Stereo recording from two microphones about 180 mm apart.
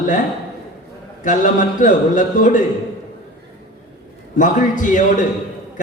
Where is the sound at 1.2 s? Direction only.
45° left (ahead or behind).